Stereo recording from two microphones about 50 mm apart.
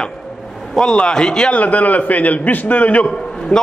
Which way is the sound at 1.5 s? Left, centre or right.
Left.